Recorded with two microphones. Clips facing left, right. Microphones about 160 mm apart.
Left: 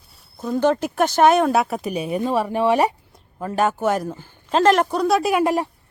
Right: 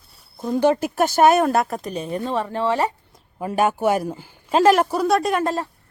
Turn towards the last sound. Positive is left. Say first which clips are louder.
# left 2 dB
turn(degrees=15)  # may be behind; listen again after turning